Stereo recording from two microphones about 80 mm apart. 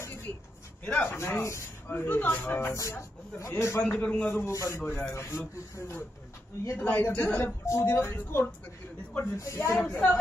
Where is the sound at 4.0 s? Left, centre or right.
Centre.